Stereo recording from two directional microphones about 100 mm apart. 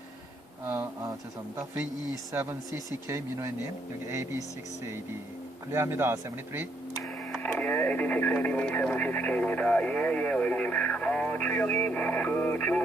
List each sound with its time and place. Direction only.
0.6 s a sound: 20° right (ahead or behind)
2.3 s speech: 25° right (ahead or behind)
5.7 s speech: 25° right (ahead or behind)
7.0 s radio: 5° left (ahead or behind)